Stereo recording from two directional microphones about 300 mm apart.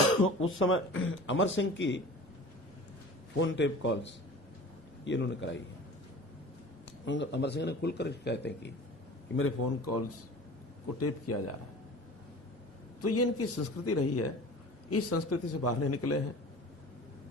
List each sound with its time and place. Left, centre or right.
0.4 s a man's voice: left
3.3 s a man's voice: left
7.0 s a man's voice: left
9.3 s a man's voice: left
13.0 s a man's voice: left